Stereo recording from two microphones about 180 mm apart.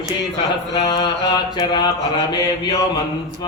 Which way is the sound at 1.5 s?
25° left (ahead or behind).